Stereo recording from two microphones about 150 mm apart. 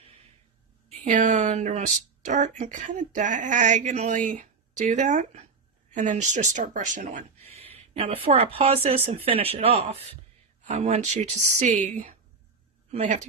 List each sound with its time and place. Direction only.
0.9 s speech: 50° right (ahead or behind)
7.9 s speech: 40° right (ahead or behind)